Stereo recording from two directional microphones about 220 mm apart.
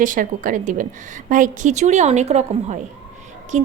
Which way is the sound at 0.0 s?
35° right (ahead or behind).